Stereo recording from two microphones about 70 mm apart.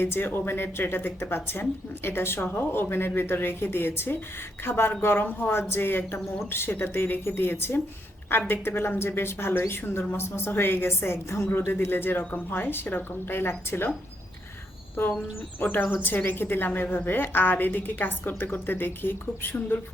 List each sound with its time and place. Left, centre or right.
0.0 s speech: left
15.6 s a woman's voice: left